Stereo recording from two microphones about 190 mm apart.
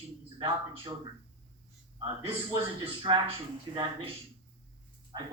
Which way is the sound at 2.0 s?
30° right (ahead or behind).